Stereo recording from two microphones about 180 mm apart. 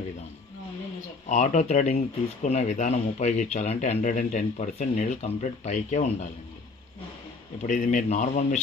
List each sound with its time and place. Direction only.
1.3 s speech: 40° left (ahead or behind)
7.6 s a man's voice: 45° left (ahead or behind)